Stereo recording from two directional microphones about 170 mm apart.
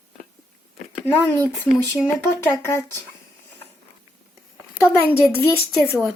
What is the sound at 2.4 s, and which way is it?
Speech, 15° left (ahead or behind).